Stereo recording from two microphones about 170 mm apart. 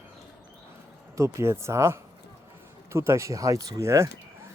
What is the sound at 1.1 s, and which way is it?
Speech, 15° right (ahead or behind).